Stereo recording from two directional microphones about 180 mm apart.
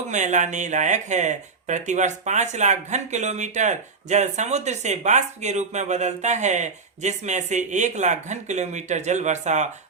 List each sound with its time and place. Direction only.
0.1 s speech: 40° right (ahead or behind)